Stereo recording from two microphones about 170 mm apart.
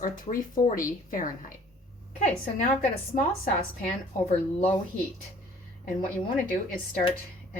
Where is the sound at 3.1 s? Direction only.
45° left (ahead or behind).